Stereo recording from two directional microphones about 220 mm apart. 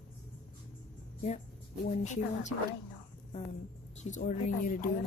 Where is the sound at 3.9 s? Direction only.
35° left (ahead or behind).